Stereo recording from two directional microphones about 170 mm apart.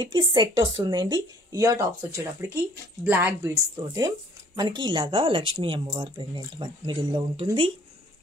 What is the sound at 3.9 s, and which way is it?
A woman's voice, 25° right (ahead or behind).